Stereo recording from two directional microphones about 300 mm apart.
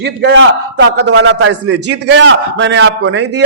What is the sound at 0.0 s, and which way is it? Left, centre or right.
A man's voice, right.